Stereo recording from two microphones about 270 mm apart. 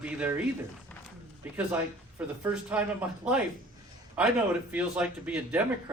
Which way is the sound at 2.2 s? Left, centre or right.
Centre.